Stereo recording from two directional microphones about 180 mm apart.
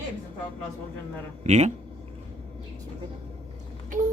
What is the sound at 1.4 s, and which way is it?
Speech, 40° right (ahead or behind).